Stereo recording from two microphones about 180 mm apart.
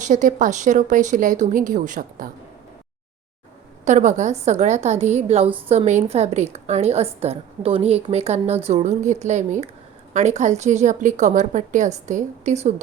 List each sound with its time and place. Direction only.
0.0 s speech: 45° right (ahead or behind)
3.8 s a woman's voice: 40° right (ahead or behind)